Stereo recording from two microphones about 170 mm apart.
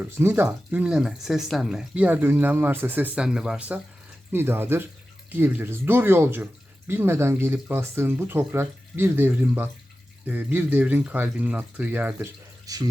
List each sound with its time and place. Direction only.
0.0 s speech: 10° right (ahead or behind)
12.7 s speech: 20° right (ahead or behind)